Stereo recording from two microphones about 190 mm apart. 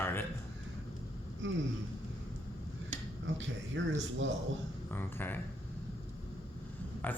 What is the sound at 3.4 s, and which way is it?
Speech, 75° right (ahead or behind).